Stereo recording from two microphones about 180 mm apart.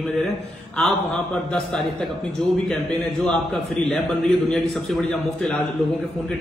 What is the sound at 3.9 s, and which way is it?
Speech, centre (ahead or behind).